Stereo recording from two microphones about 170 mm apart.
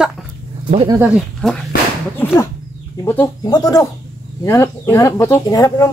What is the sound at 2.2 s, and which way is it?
Speech, 10° left (ahead or behind).